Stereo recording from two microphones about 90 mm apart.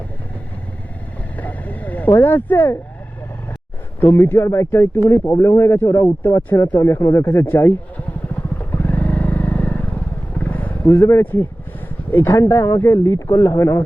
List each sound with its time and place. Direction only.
1.4 s vehicle: 20° left (ahead or behind)
2.1 s speech: 20° left (ahead or behind)
4.1 s speech: 30° left (ahead or behind)
8.5 s vehicle: 20° left (ahead or behind)
12.1 s speech: 25° left (ahead or behind)